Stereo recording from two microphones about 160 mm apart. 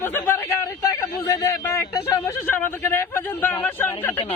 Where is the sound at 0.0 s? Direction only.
15° left (ahead or behind).